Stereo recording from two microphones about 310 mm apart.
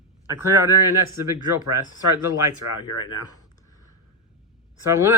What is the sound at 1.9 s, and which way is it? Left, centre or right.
Speech, left.